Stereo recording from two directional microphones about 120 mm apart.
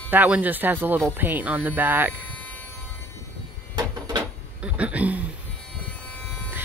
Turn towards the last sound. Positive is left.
turn(degrees=-10)  # may be behind; listen again after turning